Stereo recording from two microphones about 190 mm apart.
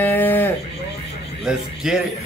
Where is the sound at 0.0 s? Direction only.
10° left (ahead or behind).